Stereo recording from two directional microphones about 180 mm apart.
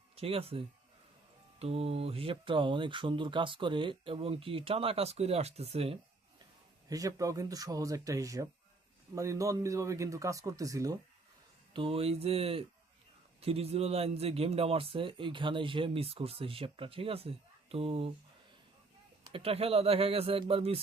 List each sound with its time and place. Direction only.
0.2 s speech: 35° right (ahead or behind)
6.8 s speech: 20° right (ahead or behind)
11.7 s speech: 30° right (ahead or behind)
19.2 s speech: 30° right (ahead or behind)